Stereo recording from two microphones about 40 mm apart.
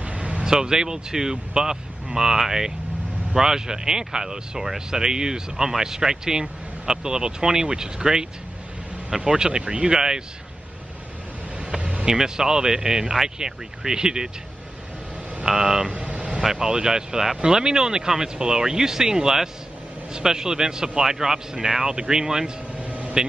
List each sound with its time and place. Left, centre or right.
0.0 s vehicle: right
0.5 s speech: centre
11.8 s vehicle: right
12.1 s speech: centre
15.4 s speech: centre
15.9 s vehicle: right
16.4 s speech: centre
22.8 s vehicle: right